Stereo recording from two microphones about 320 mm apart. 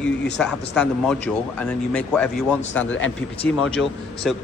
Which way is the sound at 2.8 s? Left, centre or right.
Left.